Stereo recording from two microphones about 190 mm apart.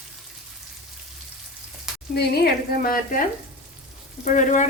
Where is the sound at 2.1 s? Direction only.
55° left (ahead or behind).